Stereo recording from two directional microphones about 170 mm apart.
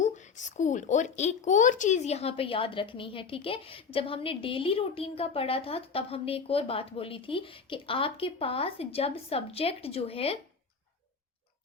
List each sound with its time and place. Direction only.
0.0 s speech: 45° left (ahead or behind)